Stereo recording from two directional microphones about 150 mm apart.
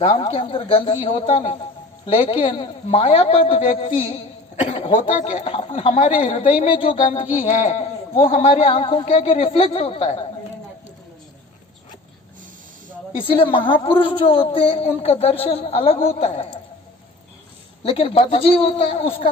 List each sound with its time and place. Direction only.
0.0 s speech: 35° left (ahead or behind)
13.1 s speech: 35° left (ahead or behind)
17.8 s speech: 40° left (ahead or behind)